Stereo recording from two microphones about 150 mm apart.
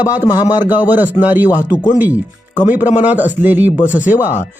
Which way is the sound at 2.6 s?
10° right (ahead or behind).